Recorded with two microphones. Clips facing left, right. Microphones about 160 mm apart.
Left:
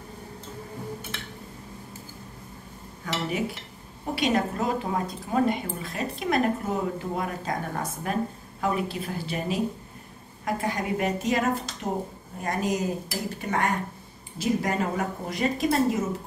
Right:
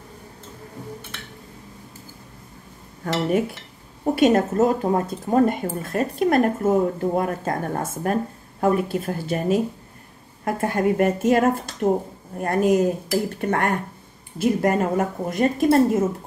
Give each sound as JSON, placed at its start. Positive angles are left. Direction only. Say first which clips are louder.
{"t": 3.3, "sound": "speech", "louder": "right 7 dB", "side_deg": -50}